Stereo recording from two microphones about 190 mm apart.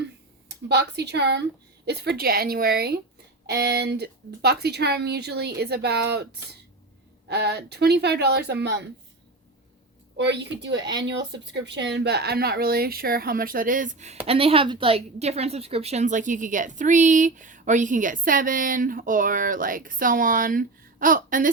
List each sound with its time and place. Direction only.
0.7 s a woman's voice: 60° right (ahead or behind)
10.2 s a woman's voice: 65° right (ahead or behind); by 21.5 s 45° right (ahead or behind)